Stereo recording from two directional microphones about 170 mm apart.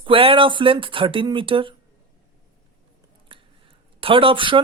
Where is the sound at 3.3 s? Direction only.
30° right (ahead or behind).